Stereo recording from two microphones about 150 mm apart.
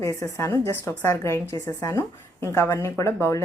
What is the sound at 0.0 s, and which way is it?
A woman's voice, 20° left (ahead or behind).